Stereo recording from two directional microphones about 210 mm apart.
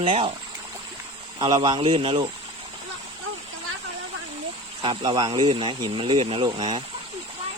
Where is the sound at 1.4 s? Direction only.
20° right (ahead or behind).